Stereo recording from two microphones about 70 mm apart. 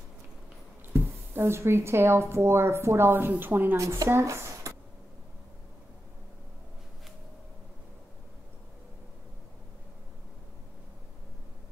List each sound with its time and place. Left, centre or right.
0.8 s speech: right
3.7 s speech: right
4.2 s a sound: right